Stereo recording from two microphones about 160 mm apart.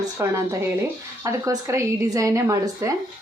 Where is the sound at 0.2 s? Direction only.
15° right (ahead or behind).